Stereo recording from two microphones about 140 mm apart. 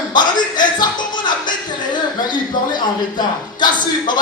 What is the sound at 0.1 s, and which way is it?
Music, 30° left (ahead or behind).